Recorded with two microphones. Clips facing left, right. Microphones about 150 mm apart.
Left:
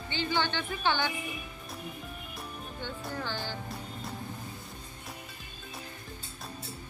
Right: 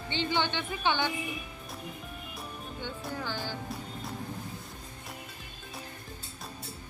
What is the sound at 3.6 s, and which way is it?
Music, centre (ahead or behind).